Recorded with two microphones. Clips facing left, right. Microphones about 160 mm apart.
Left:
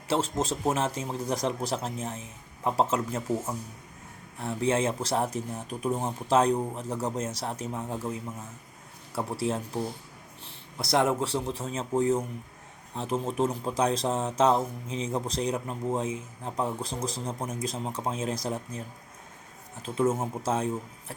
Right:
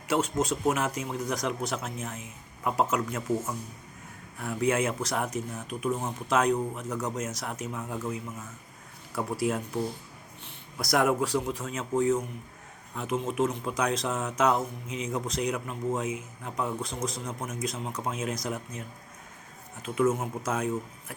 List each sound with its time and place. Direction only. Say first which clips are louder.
0.1 s speech: right 1 dB; 30° left (ahead or behind)